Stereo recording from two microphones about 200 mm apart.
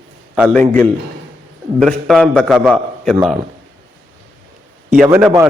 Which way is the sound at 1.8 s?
Centre (ahead or behind).